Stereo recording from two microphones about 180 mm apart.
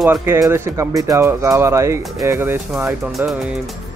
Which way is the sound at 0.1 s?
15° right (ahead or behind).